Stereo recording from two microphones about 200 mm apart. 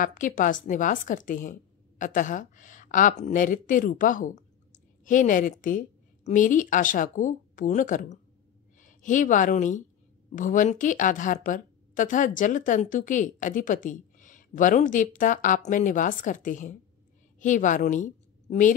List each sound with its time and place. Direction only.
0.0 s a woman's voice: 40° left (ahead or behind)